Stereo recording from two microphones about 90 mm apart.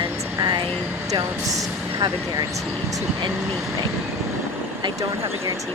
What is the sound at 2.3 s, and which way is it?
Speech, 40° right (ahead or behind).